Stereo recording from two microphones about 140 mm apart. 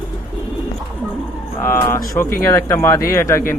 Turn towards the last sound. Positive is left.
turn(degrees=20)  # may be behind; listen again after turning